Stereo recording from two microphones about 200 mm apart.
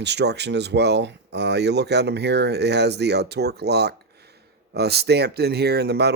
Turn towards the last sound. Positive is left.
turn(degrees=-55)  # may be behind; listen again after turning